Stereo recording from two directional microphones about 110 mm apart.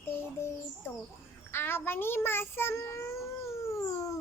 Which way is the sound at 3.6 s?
25° left (ahead or behind).